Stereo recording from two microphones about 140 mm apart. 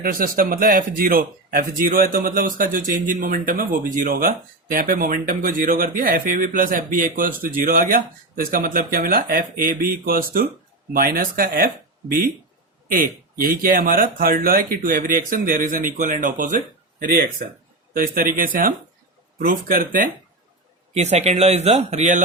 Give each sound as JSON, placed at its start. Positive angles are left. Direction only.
{"t": 0.0, "sound": "a man's voice", "side_deg": -90}
{"t": 7.4, "sound": "a man's voice", "side_deg": -90}
{"t": 13.4, "sound": "a man's voice", "side_deg": -90}
{"t": 17.0, "sound": "speech", "side_deg": -90}
{"t": 20.9, "sound": "speech", "side_deg": -50}